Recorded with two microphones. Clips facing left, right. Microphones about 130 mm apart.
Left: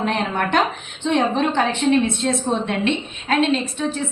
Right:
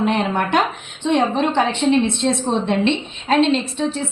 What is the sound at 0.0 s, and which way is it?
A woman's voice, 15° right (ahead or behind).